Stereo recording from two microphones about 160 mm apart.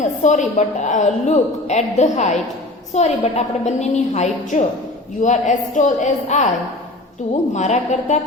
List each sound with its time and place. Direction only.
0.2 s a woman's voice: 50° left (ahead or behind)
7.5 s a woman's voice: 45° left (ahead or behind)